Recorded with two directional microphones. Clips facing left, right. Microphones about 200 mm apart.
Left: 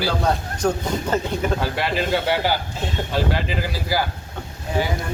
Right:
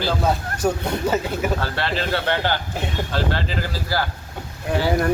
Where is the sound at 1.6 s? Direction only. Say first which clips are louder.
Left 2 dB; 15° left (ahead or behind).